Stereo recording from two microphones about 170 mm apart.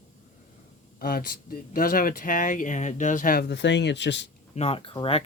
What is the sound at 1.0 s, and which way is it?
Speech, 60° left (ahead or behind).